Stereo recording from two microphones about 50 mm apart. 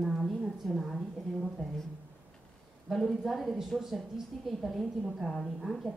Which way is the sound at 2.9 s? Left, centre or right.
Centre.